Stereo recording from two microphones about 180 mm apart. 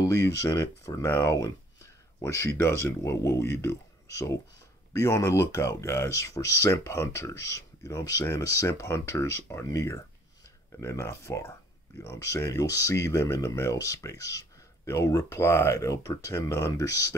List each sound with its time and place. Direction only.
0.0 s speech: 15° left (ahead or behind)